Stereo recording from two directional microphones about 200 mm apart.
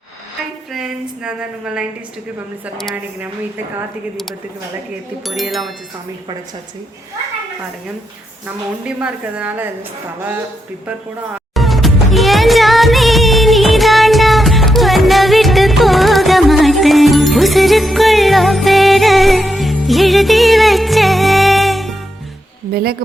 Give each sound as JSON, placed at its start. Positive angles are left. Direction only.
{"t": 0.7, "sound": "a woman's voice", "side_deg": -5}
{"t": 5.2, "sound": "a woman's voice", "side_deg": 0}
{"t": 8.8, "sound": "a woman's voice", "side_deg": -5}
{"t": 11.5, "sound": "music", "side_deg": 0}
{"t": 22.7, "sound": "speech", "side_deg": -50}